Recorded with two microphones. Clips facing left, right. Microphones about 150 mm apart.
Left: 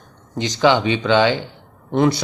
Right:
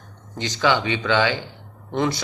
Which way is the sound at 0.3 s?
20° left (ahead or behind).